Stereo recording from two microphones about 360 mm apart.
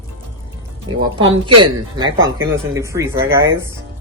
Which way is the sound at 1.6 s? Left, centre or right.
Centre.